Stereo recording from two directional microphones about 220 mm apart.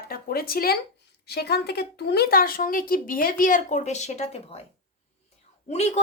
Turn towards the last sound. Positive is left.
turn(degrees=30)  # may be behind; listen again after turning